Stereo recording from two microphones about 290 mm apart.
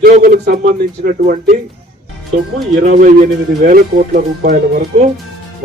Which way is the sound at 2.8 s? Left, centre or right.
Right.